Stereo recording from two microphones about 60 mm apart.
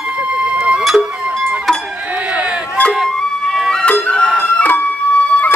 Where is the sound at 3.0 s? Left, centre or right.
Centre.